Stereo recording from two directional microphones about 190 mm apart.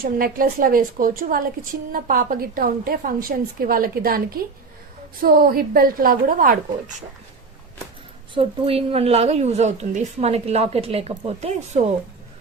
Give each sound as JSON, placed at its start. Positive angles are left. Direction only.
{"t": 0.0, "sound": "a woman's voice", "side_deg": -50}
{"t": 5.2, "sound": "a woman's voice", "side_deg": -50}
{"t": 8.4, "sound": "a woman's voice", "side_deg": -30}